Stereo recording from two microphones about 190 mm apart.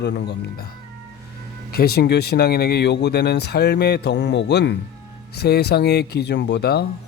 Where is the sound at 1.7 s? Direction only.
55° left (ahead or behind).